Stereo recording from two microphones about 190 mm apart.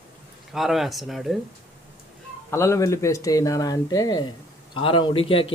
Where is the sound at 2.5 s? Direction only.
15° left (ahead or behind).